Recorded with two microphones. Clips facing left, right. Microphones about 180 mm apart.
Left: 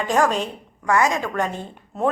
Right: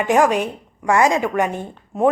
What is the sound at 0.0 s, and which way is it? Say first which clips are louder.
A woman's voice: right 4 dB; 15° right (ahead or behind).